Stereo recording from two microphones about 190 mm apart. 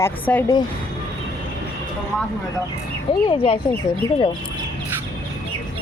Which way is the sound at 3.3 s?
30° left (ahead or behind).